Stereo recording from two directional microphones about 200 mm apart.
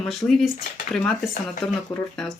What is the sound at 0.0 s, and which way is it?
Speech, centre (ahead or behind).